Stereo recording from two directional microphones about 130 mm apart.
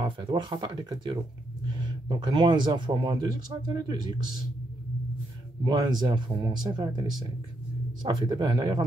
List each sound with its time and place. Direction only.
0.0 s speech: 35° right (ahead or behind)
5.6 s speech: 35° right (ahead or behind)